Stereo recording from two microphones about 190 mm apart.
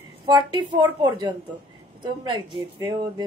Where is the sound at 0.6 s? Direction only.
25° right (ahead or behind).